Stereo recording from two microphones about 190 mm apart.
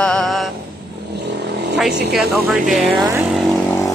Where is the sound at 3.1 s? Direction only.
10° right (ahead or behind).